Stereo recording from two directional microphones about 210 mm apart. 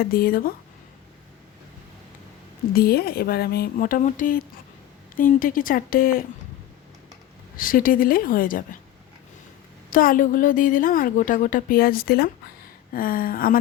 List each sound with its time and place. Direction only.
0.0 s speech: 45° left (ahead or behind)
2.7 s a woman's voice: 45° left (ahead or behind)
7.5 s a woman's voice: 40° left (ahead or behind)
9.9 s a woman's voice: 40° left (ahead or behind)